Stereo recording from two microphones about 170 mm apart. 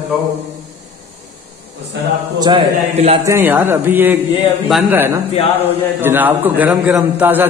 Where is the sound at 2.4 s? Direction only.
30° right (ahead or behind).